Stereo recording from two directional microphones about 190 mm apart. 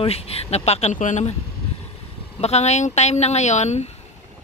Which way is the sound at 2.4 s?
35° left (ahead or behind).